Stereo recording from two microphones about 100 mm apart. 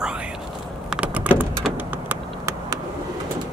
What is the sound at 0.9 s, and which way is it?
Vehicle, 15° right (ahead or behind).